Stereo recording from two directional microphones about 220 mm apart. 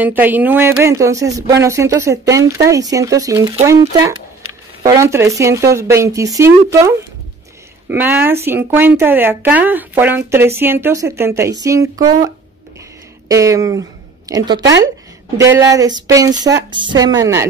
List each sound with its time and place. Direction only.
0.0 s speech: 10° right (ahead or behind)
13.3 s speech: 15° right (ahead or behind)